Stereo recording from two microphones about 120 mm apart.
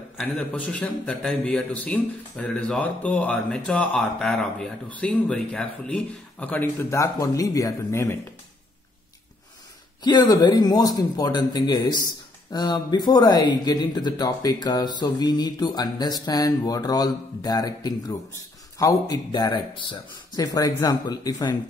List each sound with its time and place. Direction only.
0.2 s a man's voice: 10° left (ahead or behind); by 8.2 s 25° left (ahead or behind)
10.0 s speech: 35° left (ahead or behind)